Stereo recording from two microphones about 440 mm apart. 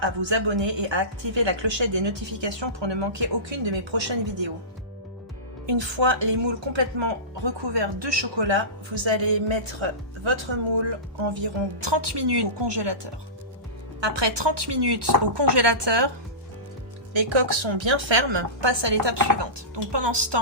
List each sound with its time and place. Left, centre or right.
0.0 s a woman's voice: right
5.6 s a woman's voice: right
9.0 s a woman's voice: right
14.0 s speech: right
17.2 s a woman's voice: right
19.2 s speech: right